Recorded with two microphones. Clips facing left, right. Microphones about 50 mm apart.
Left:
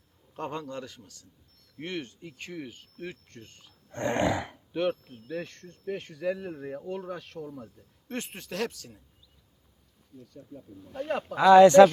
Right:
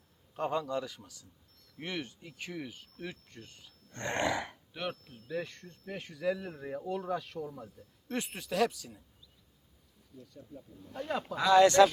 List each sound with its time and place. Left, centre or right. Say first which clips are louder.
0.3 s a man's voice: right 3 dB; centre
3.7 s speech: left 7 dB; left
5.4 s speech: left 1 dB; centre
10.2 s speech: left 3 dB; centre
11.3 s speech: left 8 dB; left